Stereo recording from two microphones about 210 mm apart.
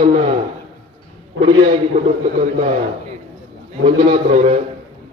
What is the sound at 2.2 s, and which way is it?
Speech, 30° right (ahead or behind).